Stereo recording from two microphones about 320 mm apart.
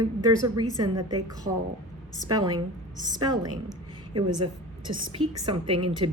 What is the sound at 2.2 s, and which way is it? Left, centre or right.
A woman's voice, centre.